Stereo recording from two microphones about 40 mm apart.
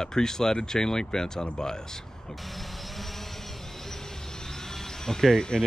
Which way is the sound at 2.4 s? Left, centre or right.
Centre.